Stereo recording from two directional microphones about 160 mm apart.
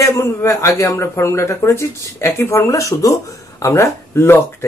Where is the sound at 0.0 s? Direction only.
15° left (ahead or behind).